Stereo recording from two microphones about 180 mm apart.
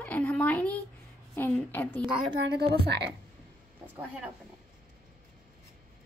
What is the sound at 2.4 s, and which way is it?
Speech, 70° right (ahead or behind).